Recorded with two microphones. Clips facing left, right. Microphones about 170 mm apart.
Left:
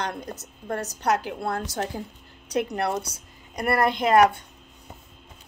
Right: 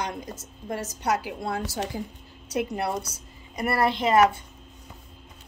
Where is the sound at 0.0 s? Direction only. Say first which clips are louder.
Left 1 dB; 10° right (ahead or behind).